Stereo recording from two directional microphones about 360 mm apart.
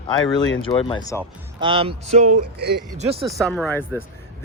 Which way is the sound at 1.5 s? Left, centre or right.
Centre.